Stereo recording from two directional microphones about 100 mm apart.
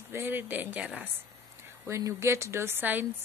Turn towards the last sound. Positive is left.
turn(degrees=-20)  # may be behind; listen again after turning